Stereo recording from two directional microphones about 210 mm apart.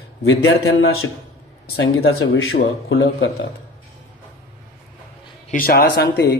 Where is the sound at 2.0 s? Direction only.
50° left (ahead or behind).